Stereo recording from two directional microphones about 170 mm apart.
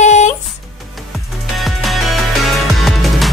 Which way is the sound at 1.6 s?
Centre (ahead or behind).